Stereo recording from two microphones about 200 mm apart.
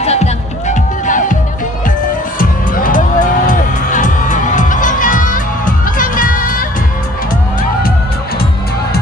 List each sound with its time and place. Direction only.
0.0 s music: 35° left (ahead or behind)